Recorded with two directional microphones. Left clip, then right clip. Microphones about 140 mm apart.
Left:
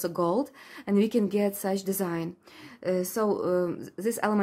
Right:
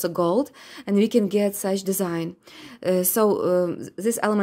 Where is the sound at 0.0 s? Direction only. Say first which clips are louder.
Right 5 dB; 30° right (ahead or behind).